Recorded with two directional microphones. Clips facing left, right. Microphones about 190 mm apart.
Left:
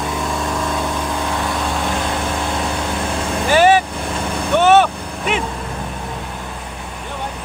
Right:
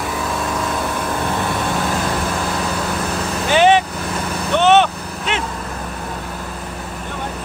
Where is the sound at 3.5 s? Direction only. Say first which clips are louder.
Even; 5° left (ahead or behind).